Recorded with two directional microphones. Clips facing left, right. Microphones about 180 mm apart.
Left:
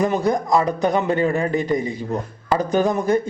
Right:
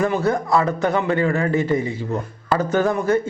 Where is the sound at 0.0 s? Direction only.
15° left (ahead or behind).